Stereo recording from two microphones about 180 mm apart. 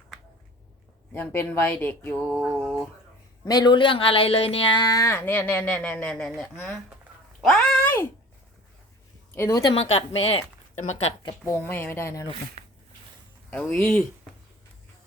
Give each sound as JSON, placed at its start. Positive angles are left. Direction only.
{"t": 1.1, "sound": "speech", "side_deg": 10}
{"t": 3.4, "sound": "speech", "side_deg": 20}
{"t": 9.3, "sound": "speech", "side_deg": 15}
{"t": 9.7, "sound": "speech", "side_deg": 35}
{"t": 12.6, "sound": "a sound", "side_deg": -40}
{"t": 13.5, "sound": "speech", "side_deg": 5}